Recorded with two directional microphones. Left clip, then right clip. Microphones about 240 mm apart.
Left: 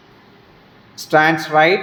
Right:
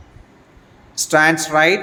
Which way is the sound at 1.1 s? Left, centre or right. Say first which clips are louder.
Even; centre.